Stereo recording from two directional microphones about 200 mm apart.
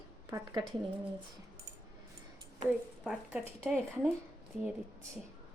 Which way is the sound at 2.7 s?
5° right (ahead or behind).